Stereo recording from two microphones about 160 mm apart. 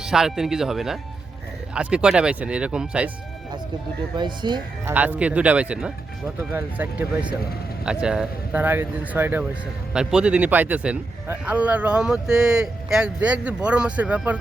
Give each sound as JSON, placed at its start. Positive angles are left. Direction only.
{"t": 0.0, "sound": "a man's voice", "side_deg": -5}
{"t": 4.2, "sound": "speech", "side_deg": -30}
{"t": 4.9, "sound": "a man's voice", "side_deg": -10}